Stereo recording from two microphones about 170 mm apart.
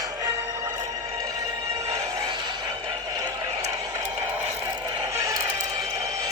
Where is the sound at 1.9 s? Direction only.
25° right (ahead or behind).